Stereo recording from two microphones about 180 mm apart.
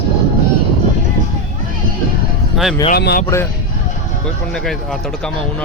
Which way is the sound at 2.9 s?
60° left (ahead or behind).